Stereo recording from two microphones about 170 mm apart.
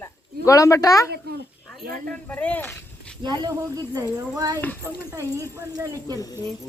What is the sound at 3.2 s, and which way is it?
Speech, 25° right (ahead or behind).